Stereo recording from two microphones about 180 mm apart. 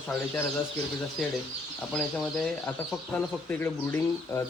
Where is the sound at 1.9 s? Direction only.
Centre (ahead or behind).